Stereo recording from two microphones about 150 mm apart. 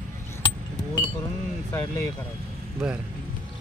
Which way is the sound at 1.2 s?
15° left (ahead or behind).